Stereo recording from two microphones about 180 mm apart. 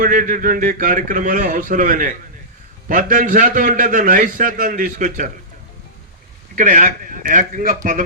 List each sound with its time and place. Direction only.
0.0 s a man's voice: 45° right (ahead or behind)
6.6 s a man's voice: 50° right (ahead or behind)